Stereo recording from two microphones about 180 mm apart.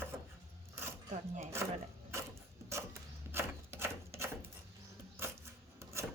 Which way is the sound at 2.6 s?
15° right (ahead or behind).